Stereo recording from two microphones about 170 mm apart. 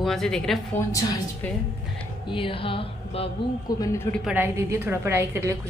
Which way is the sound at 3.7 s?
20° left (ahead or behind).